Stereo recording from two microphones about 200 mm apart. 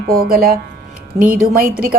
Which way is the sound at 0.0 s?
50° right (ahead or behind).